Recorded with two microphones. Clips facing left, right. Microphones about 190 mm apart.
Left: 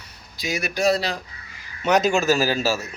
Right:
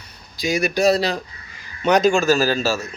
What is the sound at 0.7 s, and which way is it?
Speech, 35° right (ahead or behind).